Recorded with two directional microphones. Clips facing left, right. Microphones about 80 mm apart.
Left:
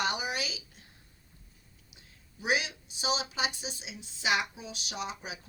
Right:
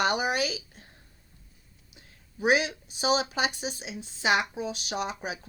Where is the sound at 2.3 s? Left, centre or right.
Right.